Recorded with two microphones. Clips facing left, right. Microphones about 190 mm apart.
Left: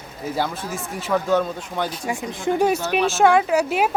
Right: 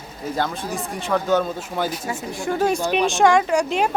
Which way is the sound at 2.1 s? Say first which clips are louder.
Left 2 dB; 20° left (ahead or behind).